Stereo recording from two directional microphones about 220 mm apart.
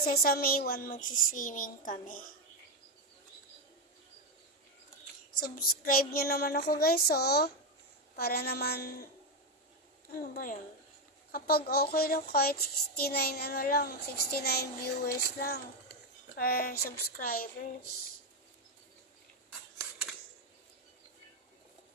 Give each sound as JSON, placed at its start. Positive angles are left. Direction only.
{"t": 0.0, "sound": "a child's voice", "side_deg": 45}
{"t": 5.4, "sound": "a child's voice", "side_deg": 40}
{"t": 10.1, "sound": "a child's voice", "side_deg": 40}
{"t": 19.8, "sound": "scissors", "side_deg": -10}